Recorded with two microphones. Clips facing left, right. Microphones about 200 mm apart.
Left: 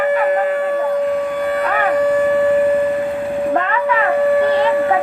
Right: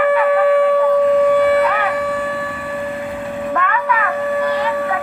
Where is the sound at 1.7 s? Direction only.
50° left (ahead or behind).